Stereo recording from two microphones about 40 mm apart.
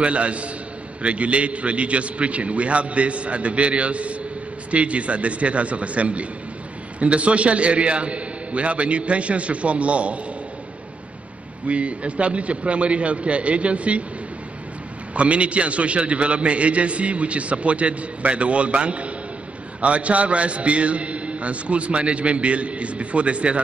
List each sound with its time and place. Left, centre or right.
0.0 s a man's voice: right
11.6 s a man's voice: right
15.1 s a man's voice: right